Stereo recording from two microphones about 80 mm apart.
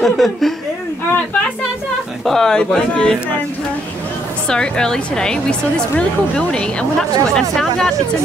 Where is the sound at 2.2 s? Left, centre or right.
Centre.